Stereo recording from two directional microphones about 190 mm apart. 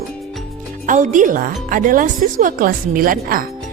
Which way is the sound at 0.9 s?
40° right (ahead or behind).